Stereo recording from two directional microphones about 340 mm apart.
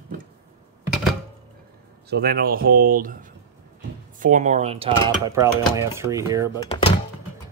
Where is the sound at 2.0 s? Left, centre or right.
Right; by 6.6 s centre.